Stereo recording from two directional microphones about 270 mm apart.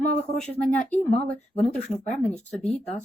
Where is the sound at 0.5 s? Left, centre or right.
Centre.